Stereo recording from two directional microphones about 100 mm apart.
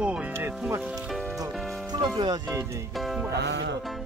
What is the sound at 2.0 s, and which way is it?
Speech, 50° right (ahead or behind).